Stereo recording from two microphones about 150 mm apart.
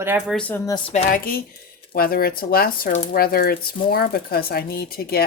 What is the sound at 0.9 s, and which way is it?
Speech, 65° left (ahead or behind).